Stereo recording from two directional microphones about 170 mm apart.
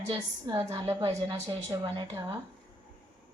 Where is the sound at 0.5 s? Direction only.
25° right (ahead or behind).